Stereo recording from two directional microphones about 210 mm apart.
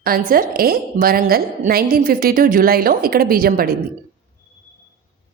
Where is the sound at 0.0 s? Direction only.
45° right (ahead or behind).